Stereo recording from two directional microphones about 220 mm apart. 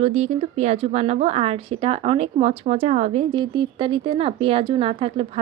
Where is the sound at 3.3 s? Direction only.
20° right (ahead or behind).